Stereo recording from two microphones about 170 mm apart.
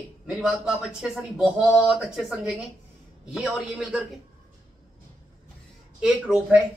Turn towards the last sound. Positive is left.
turn(degrees=-5)  # may be behind; listen again after turning